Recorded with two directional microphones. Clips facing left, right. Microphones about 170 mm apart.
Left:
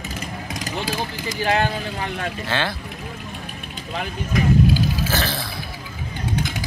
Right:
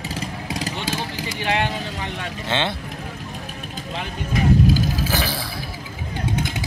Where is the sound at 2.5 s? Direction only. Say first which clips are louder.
Right 2 dB; 20° right (ahead or behind).